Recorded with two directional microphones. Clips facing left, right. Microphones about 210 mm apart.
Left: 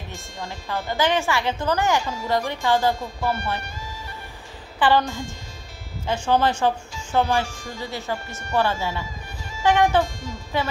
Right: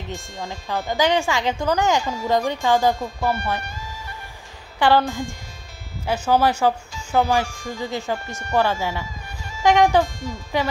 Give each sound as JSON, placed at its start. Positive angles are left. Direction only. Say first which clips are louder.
{"t": 0.1, "sound": "speech", "louder": "right 3 dB", "side_deg": -15}
{"t": 4.7, "sound": "speech", "louder": "right 2 dB", "side_deg": -10}